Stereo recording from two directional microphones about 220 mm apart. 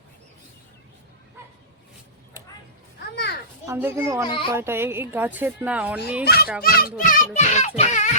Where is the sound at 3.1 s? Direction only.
50° left (ahead or behind).